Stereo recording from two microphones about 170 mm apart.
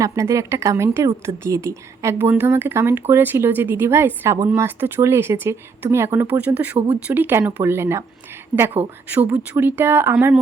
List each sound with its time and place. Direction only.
0.0 s speech: 20° right (ahead or behind)